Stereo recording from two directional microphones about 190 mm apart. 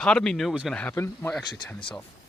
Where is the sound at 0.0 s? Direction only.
5° left (ahead or behind).